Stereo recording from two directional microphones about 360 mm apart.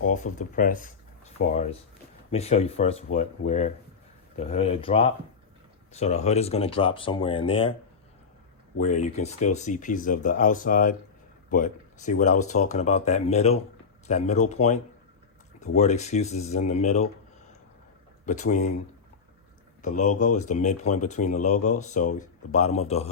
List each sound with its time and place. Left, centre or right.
0.1 s speech: centre
8.8 s speech: centre
18.3 s speech: centre
19.8 s speech: left